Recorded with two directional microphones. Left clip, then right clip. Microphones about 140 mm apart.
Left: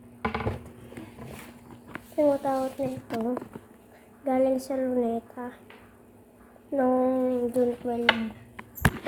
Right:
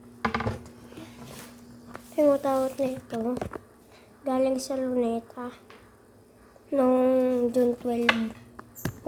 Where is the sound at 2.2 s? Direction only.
25° right (ahead or behind).